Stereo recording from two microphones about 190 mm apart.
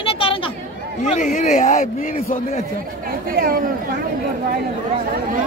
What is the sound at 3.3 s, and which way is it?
Speech, 50° right (ahead or behind).